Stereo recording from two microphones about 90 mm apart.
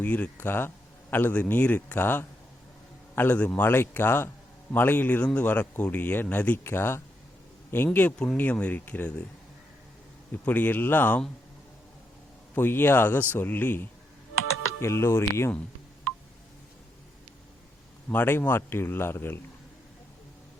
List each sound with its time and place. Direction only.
0.0 s speech: 20° left (ahead or behind)
10.4 s speech: 20° left (ahead or behind)
12.5 s speech: 25° left (ahead or behind)
18.1 s speech: 25° left (ahead or behind)